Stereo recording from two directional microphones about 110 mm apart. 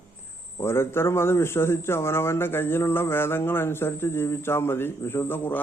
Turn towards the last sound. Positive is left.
turn(degrees=20)  # may be behind; listen again after turning